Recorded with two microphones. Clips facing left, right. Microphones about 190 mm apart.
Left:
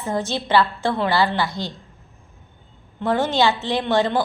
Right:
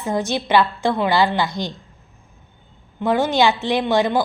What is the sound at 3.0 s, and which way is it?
A woman's voice, 10° right (ahead or behind).